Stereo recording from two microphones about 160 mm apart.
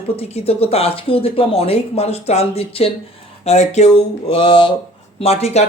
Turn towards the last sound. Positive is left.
turn(degrees=40)  # may be behind; listen again after turning